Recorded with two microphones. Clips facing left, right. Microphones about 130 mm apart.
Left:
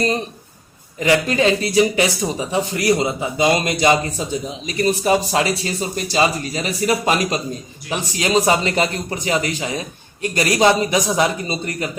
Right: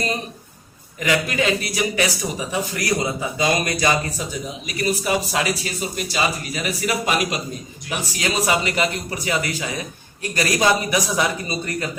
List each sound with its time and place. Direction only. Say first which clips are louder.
0.9 s speech: left 4 dB; 30° left (ahead or behind)